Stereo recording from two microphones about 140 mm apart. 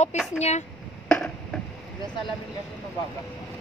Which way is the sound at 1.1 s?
10° left (ahead or behind).